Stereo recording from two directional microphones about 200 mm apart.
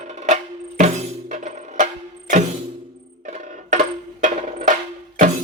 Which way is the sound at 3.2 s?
40° right (ahead or behind).